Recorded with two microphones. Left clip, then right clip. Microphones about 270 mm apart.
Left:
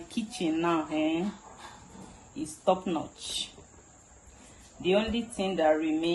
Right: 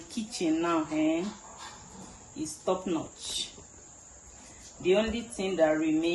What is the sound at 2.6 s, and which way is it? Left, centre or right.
Speech, centre.